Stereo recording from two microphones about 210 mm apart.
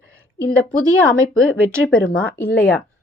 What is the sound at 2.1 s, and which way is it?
Speech, 5° left (ahead or behind).